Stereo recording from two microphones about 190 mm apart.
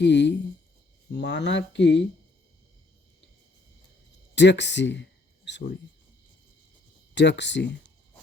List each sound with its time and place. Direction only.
0.0 s speech: 65° left (ahead or behind)
4.4 s speech: 65° left (ahead or behind)
7.1 s speech: 65° left (ahead or behind)